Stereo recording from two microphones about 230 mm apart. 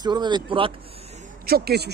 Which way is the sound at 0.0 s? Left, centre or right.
Centre.